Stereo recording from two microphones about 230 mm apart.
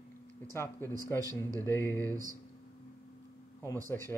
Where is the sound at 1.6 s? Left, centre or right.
Centre.